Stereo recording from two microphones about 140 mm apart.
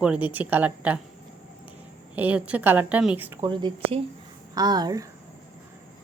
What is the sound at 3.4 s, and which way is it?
A woman's voice, 35° right (ahead or behind).